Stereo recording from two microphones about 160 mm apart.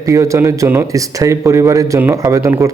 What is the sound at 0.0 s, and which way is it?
Speech, 20° right (ahead or behind).